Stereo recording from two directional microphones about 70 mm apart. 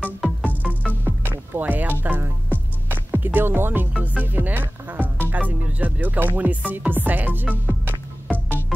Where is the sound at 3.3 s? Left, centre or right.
Right.